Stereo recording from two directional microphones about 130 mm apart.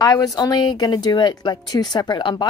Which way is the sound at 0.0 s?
30° left (ahead or behind).